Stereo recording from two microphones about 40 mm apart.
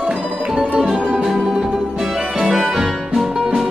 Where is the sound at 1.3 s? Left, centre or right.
Centre.